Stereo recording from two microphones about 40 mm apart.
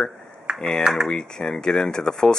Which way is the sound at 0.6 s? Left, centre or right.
Centre.